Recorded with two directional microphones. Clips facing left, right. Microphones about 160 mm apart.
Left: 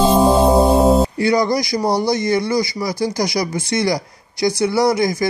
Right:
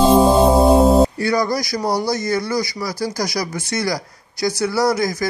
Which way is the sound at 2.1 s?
15° left (ahead or behind).